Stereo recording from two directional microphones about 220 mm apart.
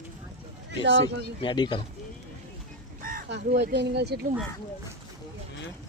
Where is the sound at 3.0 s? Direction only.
40° right (ahead or behind).